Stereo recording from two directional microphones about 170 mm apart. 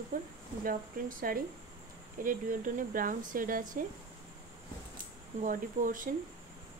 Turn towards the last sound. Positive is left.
turn(degrees=-55)  # may be behind; listen again after turning